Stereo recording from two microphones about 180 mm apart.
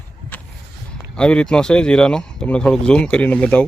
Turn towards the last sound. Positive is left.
turn(degrees=5)  # may be behind; listen again after turning